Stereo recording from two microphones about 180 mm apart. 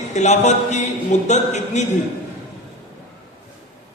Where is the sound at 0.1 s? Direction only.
40° left (ahead or behind).